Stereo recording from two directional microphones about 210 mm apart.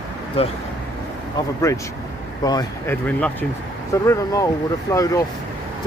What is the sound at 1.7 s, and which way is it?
Speech, 15° left (ahead or behind).